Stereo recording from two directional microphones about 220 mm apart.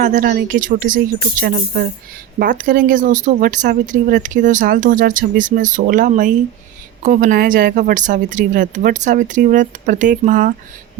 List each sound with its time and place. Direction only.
0.0 s speech: 35° right (ahead or behind)